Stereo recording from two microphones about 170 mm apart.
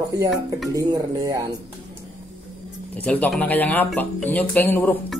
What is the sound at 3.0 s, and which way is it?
Speech, 10° left (ahead or behind).